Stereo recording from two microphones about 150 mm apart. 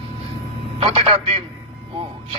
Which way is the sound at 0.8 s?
40° right (ahead or behind).